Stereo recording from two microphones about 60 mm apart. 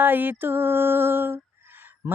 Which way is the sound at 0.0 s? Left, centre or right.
Right.